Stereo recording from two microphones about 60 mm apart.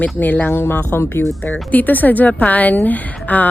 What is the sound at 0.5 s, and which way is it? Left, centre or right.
Speech, left.